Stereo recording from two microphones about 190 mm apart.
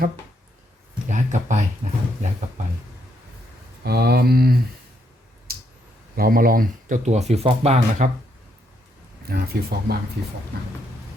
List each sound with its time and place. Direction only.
1.0 s speech: 40° right (ahead or behind)
3.8 s speech: 55° right (ahead or behind)
5.5 s a sound: 50° right (ahead or behind)
6.1 s speech: 50° right (ahead or behind)
9.2 s speech: 55° right (ahead or behind)